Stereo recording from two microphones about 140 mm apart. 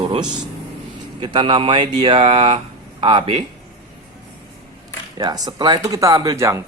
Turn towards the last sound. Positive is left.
turn(degrees=-20)  # may be behind; listen again after turning